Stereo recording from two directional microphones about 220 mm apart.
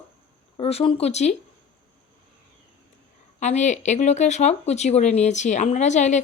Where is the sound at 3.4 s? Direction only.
30° left (ahead or behind).